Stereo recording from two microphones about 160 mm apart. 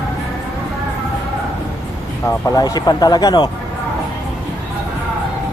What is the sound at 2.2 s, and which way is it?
Speech, 25° left (ahead or behind).